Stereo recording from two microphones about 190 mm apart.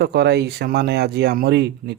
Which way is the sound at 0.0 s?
60° right (ahead or behind).